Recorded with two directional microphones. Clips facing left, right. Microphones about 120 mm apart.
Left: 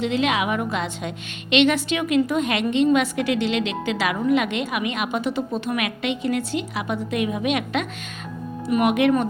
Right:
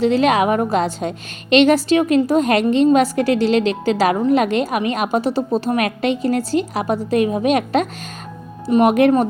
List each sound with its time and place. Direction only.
0.0 s a woman's voice: 40° right (ahead or behind)